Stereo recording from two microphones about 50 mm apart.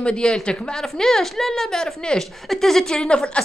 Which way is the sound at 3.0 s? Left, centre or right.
Centre.